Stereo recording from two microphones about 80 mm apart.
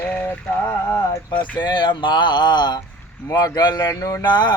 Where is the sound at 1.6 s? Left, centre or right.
Left.